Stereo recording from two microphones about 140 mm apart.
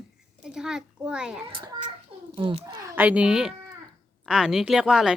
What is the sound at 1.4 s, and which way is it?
A child's voice, 35° right (ahead or behind).